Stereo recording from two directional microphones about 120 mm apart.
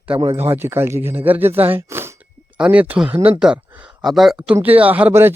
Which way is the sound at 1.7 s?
20° right (ahead or behind).